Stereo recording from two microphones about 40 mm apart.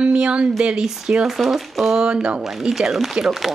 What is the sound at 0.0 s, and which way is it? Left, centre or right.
Speech, right.